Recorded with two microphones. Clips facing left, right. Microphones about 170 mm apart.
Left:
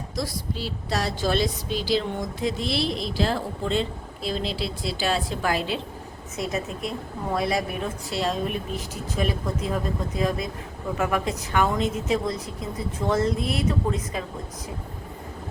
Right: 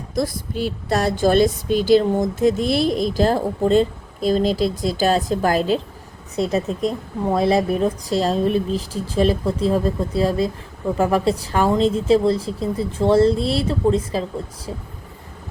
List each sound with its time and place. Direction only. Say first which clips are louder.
0.2 s a woman's voice: right 8 dB; 55° right (ahead or behind); by 14.3 s 30° right (ahead or behind)